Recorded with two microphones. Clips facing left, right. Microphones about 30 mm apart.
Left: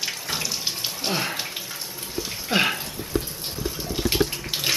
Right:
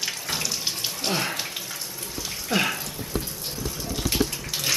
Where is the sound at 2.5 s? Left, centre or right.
Left.